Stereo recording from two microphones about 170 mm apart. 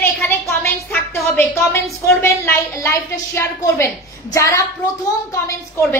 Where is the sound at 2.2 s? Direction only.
15° left (ahead or behind).